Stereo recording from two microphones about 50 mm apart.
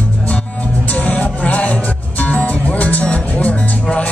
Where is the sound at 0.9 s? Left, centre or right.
Left.